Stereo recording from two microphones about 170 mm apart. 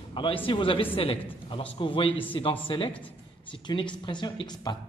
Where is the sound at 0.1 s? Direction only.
30° left (ahead or behind).